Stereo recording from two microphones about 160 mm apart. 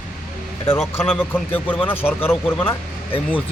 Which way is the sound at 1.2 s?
10° left (ahead or behind).